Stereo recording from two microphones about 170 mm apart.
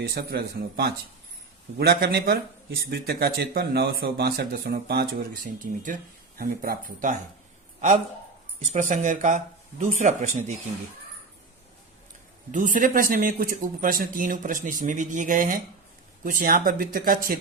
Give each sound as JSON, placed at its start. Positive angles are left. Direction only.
{"t": 0.1, "sound": "a man's voice", "side_deg": -70}
{"t": 12.5, "sound": "a man's voice", "side_deg": -50}